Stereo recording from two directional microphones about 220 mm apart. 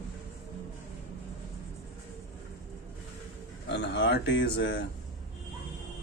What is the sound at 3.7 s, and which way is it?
Speech, 50° left (ahead or behind).